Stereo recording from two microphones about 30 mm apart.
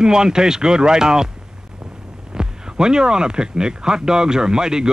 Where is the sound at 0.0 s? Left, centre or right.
Right.